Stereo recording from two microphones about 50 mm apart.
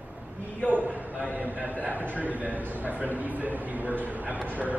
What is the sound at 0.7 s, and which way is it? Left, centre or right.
A man's voice, right.